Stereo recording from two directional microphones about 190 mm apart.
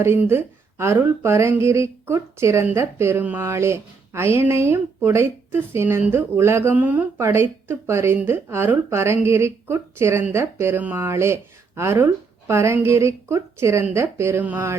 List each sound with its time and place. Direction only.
0.0 s speech: 15° right (ahead or behind)